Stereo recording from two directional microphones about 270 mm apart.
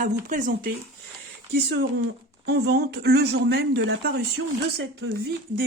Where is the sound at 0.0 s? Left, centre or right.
Right.